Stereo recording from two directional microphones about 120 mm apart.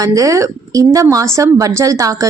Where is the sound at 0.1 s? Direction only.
25° right (ahead or behind).